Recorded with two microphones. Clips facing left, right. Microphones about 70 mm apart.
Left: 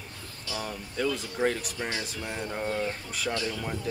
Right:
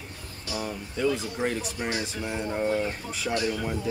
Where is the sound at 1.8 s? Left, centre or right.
Right.